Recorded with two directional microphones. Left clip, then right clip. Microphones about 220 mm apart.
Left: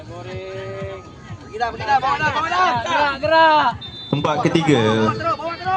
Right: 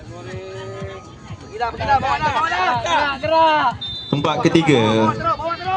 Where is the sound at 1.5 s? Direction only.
50° left (ahead or behind).